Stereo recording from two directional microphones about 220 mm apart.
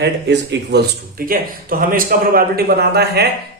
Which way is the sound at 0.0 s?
50° right (ahead or behind).